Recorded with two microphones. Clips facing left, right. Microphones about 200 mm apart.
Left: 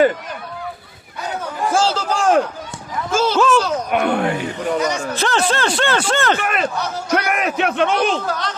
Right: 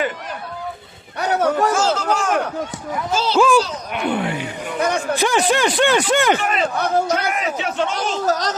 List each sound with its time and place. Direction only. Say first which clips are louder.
1.2 s a sound: right 7 dB; 75° right (ahead or behind)
1.7 s speech: even; 30° left (ahead or behind)
3.1 s speech: left 4 dB; 50° left (ahead or behind)
3.3 s speech: right 2 dB; 10° right (ahead or behind)
3.6 s speech: left 4 dB; 50° left (ahead or behind)
4.8 s speech: right 6 dB; 55° right (ahead or behind)
5.1 s speech: right 3 dB; 15° right (ahead or behind)
6.4 s a man's voice: even; 55° left (ahead or behind)
6.7 s speech: right 6 dB; 55° right (ahead or behind)
7.3 s a man's voice: left 3 dB; 60° left (ahead or behind)
8.3 s speech: right 4 dB; 40° right (ahead or behind)